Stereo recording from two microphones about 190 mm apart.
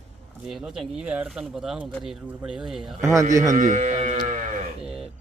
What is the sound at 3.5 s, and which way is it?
Speech, 40° right (ahead or behind).